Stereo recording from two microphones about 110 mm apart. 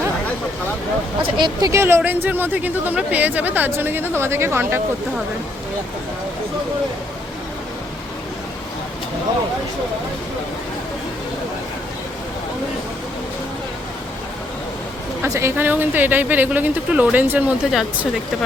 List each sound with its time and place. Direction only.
1.4 s a woman's voice: 45° right (ahead or behind)
1.7 s a woman's voice: 25° right (ahead or behind)
15.2 s a woman's voice: 25° right (ahead or behind)